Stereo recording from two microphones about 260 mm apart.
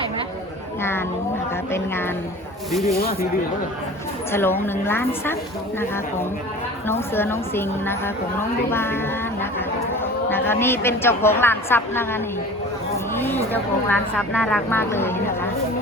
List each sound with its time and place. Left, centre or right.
0.8 s a woman's voice: centre
2.9 s speech: left
4.3 s a woman's voice: centre
6.8 s a woman's voice: centre